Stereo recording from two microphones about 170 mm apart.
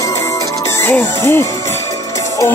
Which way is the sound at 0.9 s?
15° left (ahead or behind).